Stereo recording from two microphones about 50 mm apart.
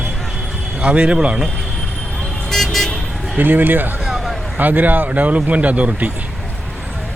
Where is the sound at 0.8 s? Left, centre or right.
Right.